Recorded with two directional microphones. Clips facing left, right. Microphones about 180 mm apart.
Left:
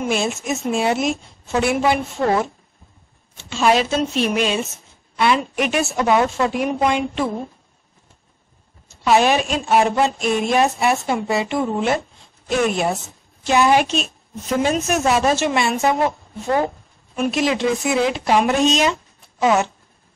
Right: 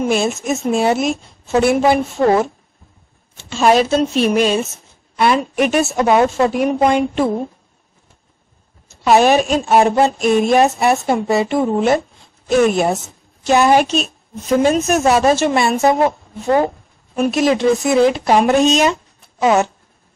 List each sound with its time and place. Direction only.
0.1 s a woman's voice: 40° right (ahead or behind)
3.4 s a woman's voice: 40° right (ahead or behind)
9.0 s a woman's voice: 45° right (ahead or behind)
17.1 s speech: 45° right (ahead or behind)